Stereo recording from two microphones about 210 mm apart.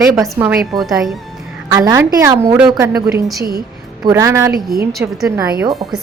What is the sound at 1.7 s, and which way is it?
A woman's voice, 15° right (ahead or behind).